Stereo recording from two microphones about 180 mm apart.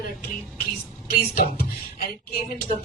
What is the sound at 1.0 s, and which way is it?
Speech, 55° left (ahead or behind).